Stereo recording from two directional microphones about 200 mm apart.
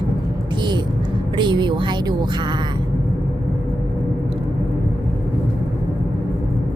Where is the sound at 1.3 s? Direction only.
20° right (ahead or behind).